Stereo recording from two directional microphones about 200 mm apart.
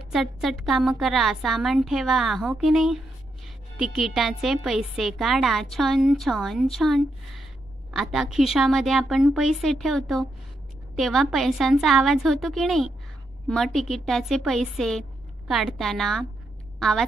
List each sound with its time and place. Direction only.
0.1 s a woman's voice: centre (ahead or behind)